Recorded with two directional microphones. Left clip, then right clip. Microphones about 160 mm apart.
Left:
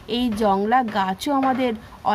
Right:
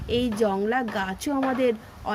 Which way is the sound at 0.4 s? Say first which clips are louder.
Left 10 dB; 35° left (ahead or behind).